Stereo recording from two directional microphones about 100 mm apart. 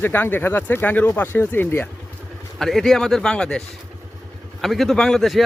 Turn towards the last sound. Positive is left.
turn(degrees=0)  # may be behind; listen again after turning